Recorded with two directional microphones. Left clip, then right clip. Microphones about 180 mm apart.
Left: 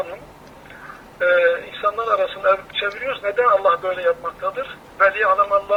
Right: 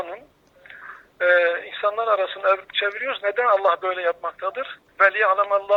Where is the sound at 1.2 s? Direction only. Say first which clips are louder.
Left 2 dB; 75° right (ahead or behind).